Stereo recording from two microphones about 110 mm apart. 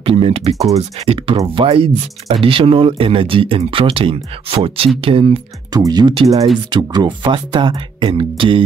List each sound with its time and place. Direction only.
0.0 s speech: 55° right (ahead or behind)
5.7 s speech: 35° right (ahead or behind)